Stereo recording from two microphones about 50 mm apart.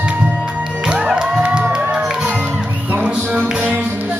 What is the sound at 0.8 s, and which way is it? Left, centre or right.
Music, right.